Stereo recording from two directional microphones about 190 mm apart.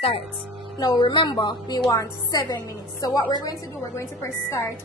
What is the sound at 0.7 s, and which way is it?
A woman's voice, 20° left (ahead or behind).